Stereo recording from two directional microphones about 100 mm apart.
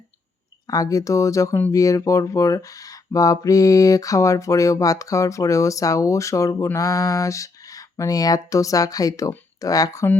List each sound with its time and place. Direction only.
0.7 s speech: 35° left (ahead or behind)